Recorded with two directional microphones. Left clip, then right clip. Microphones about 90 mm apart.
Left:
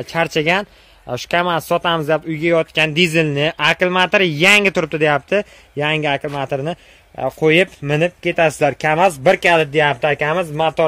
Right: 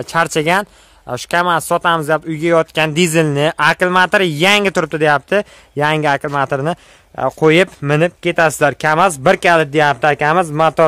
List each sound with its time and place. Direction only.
0.0 s speech: 35° right (ahead or behind)
0.5 s a man's voice: 20° right (ahead or behind)
2.4 s speech: 35° right (ahead or behind)
3.6 s a man's voice: 20° right (ahead or behind)
5.9 s a man's voice: 40° right (ahead or behind)
8.9 s a man's voice: 50° right (ahead or behind)
10.3 s speech: 65° right (ahead or behind)